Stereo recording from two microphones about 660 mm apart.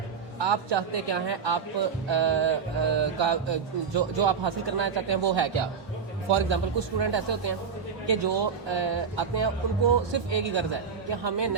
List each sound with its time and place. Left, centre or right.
0.4 s mantra: right